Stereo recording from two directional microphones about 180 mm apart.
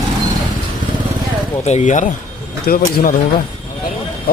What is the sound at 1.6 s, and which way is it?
Speech, 40° left (ahead or behind).